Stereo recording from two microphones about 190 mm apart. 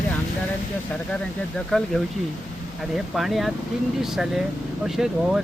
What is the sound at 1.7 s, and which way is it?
Speech, 5° left (ahead or behind).